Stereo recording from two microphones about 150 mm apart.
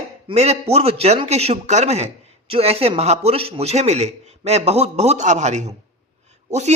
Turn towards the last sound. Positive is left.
turn(degrees=-50)  # may be behind; listen again after turning